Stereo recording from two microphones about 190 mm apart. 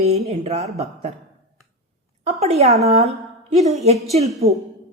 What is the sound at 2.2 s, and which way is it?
A woman's voice, 35° right (ahead or behind).